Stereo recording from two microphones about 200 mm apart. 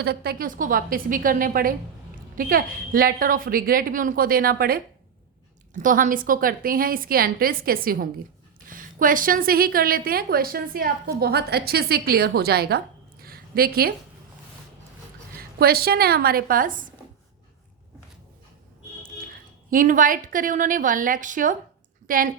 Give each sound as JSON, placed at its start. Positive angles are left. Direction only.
{"t": 0.0, "sound": "a woman's voice", "side_deg": -50}
{"t": 5.8, "sound": "a woman's voice", "side_deg": -40}
{"t": 15.4, "sound": "a woman's voice", "side_deg": -50}
{"t": 19.3, "sound": "a woman's voice", "side_deg": -45}